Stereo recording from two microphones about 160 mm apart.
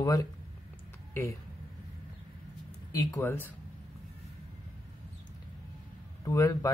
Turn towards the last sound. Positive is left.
turn(degrees=20)  # may be behind; listen again after turning